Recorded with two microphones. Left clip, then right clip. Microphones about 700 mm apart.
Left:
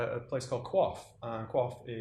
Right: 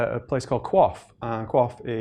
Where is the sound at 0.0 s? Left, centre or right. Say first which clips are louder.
Right 9 dB; right.